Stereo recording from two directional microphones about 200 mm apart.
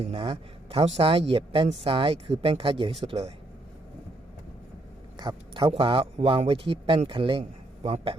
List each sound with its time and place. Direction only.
0.0 s speech: 30° right (ahead or behind)
5.1 s speech: 25° right (ahead or behind)